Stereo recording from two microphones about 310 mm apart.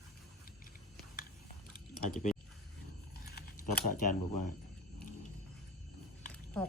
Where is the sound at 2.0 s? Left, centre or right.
Left.